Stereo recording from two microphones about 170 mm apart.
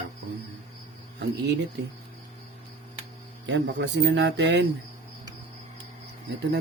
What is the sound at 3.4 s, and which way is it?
Speech, 90° right.